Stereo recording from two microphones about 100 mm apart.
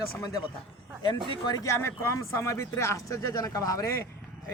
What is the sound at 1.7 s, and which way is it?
Speech, 25° left (ahead or behind).